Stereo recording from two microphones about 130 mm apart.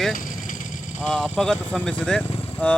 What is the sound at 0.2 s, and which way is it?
Vehicle, 90° left.